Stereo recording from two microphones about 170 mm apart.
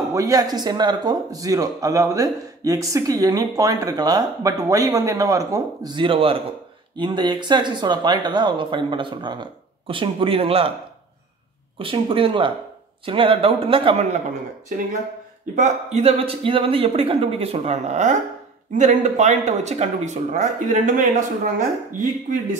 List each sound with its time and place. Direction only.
0.1 s speech: 20° right (ahead or behind)
11.8 s speech: 30° right (ahead or behind)
15.5 s speech: 40° right (ahead or behind)